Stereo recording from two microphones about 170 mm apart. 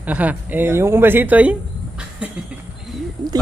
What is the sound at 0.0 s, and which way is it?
Speech, 10° right (ahead or behind).